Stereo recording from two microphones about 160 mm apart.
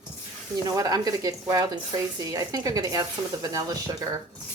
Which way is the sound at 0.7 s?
20° right (ahead or behind).